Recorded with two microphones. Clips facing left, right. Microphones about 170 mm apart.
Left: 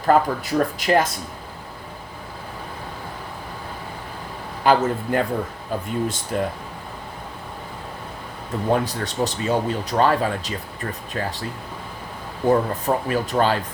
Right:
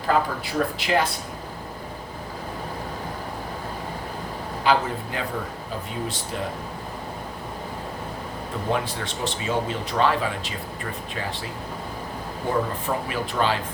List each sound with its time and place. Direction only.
0.1 s speech: 45° left (ahead or behind)
4.6 s speech: 45° left (ahead or behind)
6.3 s speech: 50° left (ahead or behind)
8.7 s speech: 40° left (ahead or behind)
12.4 s speech: 40° left (ahead or behind)